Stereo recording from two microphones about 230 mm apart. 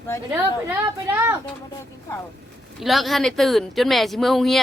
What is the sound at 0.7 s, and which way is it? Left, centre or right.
Speech, centre.